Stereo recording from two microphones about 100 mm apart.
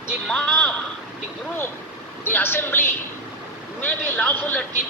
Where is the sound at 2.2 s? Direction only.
20° left (ahead or behind).